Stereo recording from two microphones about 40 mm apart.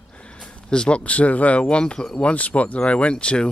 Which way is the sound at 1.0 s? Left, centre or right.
Left.